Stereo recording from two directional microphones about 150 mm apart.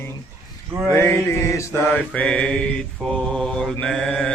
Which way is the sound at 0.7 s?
15° right (ahead or behind).